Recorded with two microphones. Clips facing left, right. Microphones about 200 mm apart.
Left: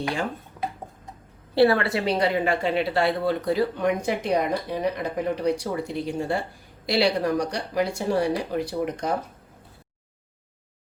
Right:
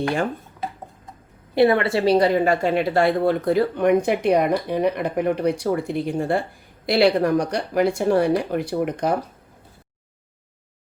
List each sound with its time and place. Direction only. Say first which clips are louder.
1.5 s a woman's voice: right 2 dB; 20° right (ahead or behind); by 9.1 s 60° right (ahead or behind)